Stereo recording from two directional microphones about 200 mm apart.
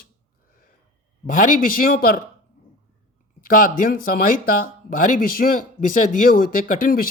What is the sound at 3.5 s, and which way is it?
Speech, 45° left (ahead or behind).